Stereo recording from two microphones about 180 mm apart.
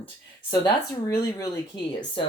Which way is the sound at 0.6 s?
15° left (ahead or behind).